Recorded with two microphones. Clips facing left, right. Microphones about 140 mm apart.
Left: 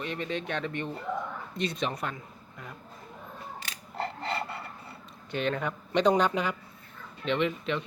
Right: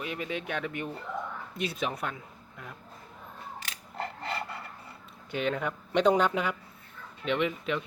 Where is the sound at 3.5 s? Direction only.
30° left (ahead or behind).